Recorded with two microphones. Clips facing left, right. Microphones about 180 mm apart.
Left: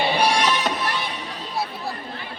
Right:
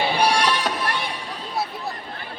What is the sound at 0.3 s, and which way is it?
Music, 10° right (ahead or behind).